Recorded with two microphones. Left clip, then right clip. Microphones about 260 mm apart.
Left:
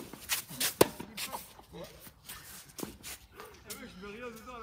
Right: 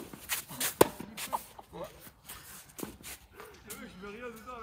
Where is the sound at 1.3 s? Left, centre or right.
Centre.